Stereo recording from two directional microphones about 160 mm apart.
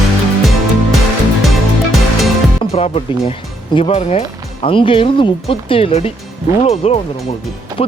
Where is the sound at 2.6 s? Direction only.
40° left (ahead or behind).